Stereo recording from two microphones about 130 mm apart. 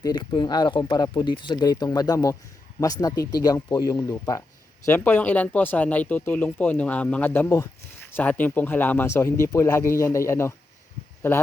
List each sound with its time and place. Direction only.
0.0 s speech: 35° left (ahead or behind); by 10.5 s 20° left (ahead or behind)